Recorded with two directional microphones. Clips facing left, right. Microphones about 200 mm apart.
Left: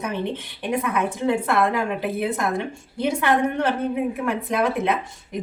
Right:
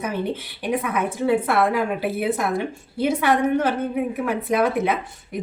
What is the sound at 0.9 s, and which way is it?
A woman's voice, 5° right (ahead or behind).